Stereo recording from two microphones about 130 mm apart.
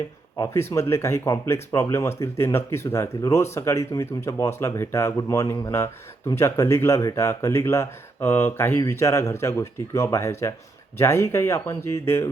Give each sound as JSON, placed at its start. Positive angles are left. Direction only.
{"t": 0.3, "sound": "speech", "side_deg": 20}